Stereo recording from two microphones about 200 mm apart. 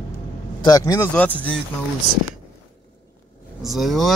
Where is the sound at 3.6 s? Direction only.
Centre (ahead or behind).